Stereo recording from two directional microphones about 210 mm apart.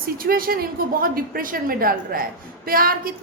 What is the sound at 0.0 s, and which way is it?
A woman's voice, 45° right (ahead or behind).